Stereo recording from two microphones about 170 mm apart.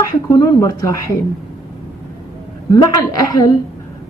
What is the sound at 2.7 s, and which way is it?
Speech, 20° left (ahead or behind).